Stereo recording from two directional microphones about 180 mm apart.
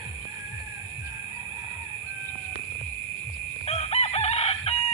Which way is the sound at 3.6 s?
35° left (ahead or behind).